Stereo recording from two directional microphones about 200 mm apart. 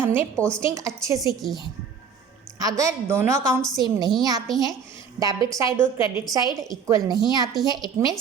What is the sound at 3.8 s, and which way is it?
A woman's voice, 20° right (ahead or behind).